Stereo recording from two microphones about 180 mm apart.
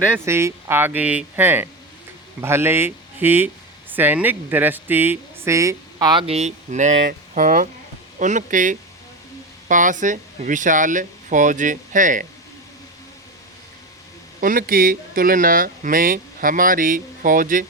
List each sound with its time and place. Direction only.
0.3 s speech: 15° right (ahead or behind); by 12.2 s 45° right (ahead or behind)
14.4 s speech: 50° right (ahead or behind)